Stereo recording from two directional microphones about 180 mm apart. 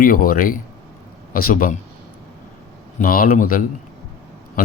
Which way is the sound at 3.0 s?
55° left (ahead or behind).